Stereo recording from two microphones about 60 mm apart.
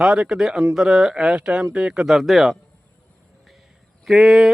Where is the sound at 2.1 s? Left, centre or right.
Centre.